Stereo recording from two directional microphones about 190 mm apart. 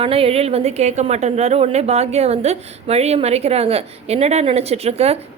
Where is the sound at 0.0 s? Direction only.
30° right (ahead or behind).